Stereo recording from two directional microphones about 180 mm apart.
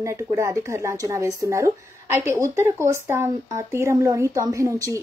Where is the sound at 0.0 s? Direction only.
15° right (ahead or behind).